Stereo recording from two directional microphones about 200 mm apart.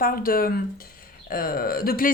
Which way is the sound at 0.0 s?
45° left (ahead or behind).